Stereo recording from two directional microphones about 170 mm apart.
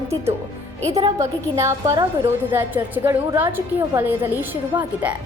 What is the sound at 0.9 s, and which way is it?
A woman's voice, 20° right (ahead or behind).